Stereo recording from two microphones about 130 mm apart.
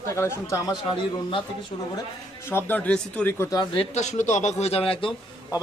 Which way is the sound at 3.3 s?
30° left (ahead or behind).